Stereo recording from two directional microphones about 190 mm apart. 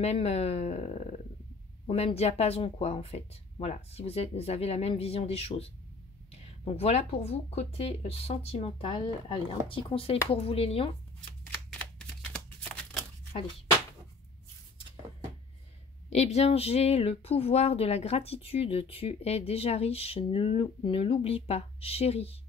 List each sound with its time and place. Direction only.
0.0 s speech: 35° left (ahead or behind)
16.1 s speech: 35° left (ahead or behind)